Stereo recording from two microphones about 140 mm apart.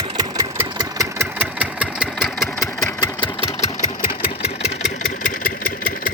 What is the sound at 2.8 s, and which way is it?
Engine, 25° left (ahead or behind).